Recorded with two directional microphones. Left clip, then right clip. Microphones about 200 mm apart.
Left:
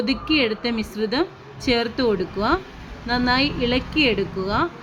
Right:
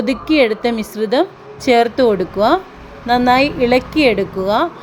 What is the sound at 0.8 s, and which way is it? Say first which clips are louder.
Speech: right 7 dB; 20° right (ahead or behind).